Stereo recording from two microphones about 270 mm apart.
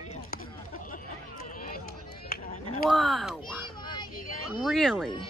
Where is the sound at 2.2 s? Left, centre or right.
Left.